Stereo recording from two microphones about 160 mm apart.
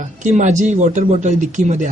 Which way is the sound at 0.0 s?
50° right (ahead or behind).